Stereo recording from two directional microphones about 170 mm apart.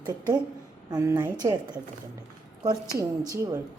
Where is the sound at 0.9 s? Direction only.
20° right (ahead or behind).